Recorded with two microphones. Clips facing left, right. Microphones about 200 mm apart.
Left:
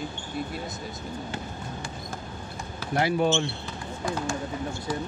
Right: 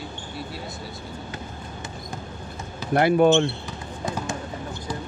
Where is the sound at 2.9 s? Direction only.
55° right (ahead or behind).